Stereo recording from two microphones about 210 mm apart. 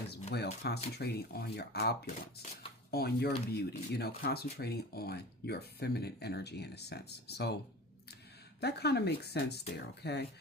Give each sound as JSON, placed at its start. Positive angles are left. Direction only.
{"t": 0.3, "sound": "speech", "side_deg": 50}
{"t": 2.9, "sound": "speech", "side_deg": 50}
{"t": 8.6, "sound": "speech", "side_deg": 50}